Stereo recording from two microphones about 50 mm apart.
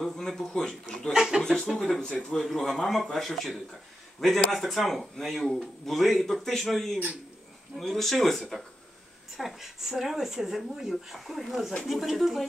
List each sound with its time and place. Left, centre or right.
0.5 s speech: centre
9.4 s speech: centre